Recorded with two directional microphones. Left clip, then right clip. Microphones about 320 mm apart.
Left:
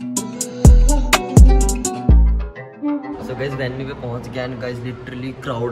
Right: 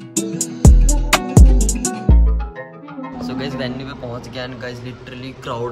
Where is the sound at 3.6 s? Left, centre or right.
Centre.